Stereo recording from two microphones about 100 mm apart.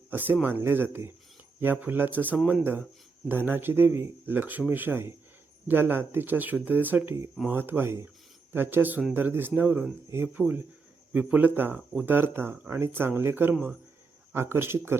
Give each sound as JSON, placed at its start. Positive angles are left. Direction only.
{"t": 0.1, "sound": "speech", "side_deg": -20}
{"t": 14.3, "sound": "speech", "side_deg": -25}